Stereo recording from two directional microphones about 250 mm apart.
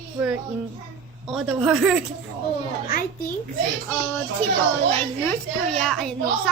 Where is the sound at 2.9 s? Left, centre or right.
Left.